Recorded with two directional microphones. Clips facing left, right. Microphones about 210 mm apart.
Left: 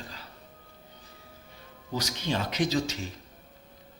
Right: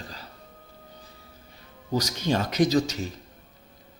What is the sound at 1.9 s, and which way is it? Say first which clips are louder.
Speech: right 5 dB; 45° right (ahead or behind).